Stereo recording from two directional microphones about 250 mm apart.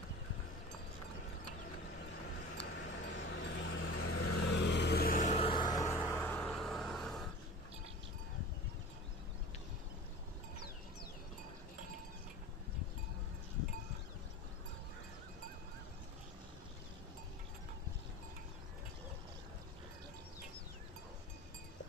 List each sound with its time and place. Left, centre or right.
2.6 s a sound: left
4.0 s vehicle: left
4.6 s vehicle: left; by 7.2 s centre